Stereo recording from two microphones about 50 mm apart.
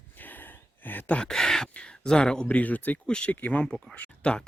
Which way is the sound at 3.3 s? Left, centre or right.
Left.